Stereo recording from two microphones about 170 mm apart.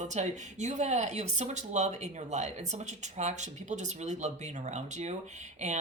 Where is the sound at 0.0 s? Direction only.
45° right (ahead or behind).